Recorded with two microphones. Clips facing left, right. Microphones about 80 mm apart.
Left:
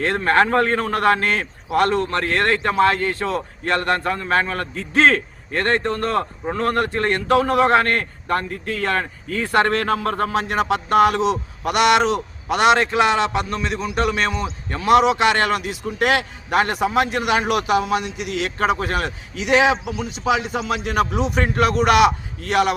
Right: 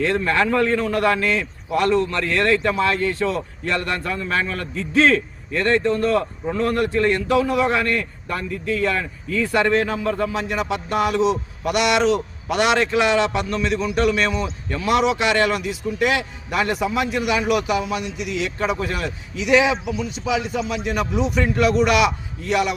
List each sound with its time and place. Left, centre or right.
0.0 s a man's voice: left
19.9 s a man's voice: left
21.2 s a man's voice: left